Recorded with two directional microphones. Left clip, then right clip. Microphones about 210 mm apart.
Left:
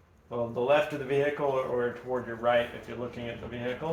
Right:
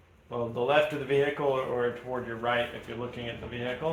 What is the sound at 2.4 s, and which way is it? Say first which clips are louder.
Speech: left 4 dB; 20° right (ahead or behind).